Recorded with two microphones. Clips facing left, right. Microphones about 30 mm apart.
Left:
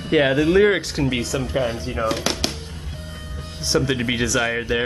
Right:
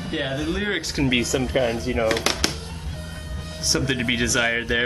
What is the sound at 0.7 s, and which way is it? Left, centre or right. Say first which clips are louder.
Speech: left 4 dB; centre.